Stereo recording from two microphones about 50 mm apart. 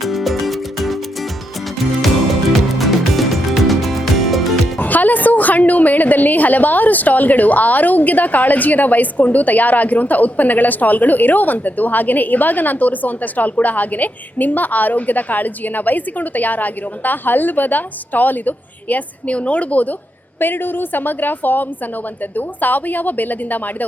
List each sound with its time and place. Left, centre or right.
0.0 s music: centre
4.8 s a woman's voice: left
20.4 s a woman's voice: left